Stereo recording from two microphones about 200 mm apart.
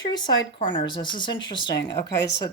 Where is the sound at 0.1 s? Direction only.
20° left (ahead or behind).